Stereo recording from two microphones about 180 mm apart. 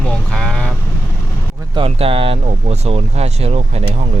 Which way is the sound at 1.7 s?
30° right (ahead or behind).